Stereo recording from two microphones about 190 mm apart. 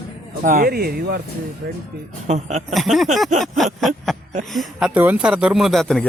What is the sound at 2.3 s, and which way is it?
Speech, 40° right (ahead or behind).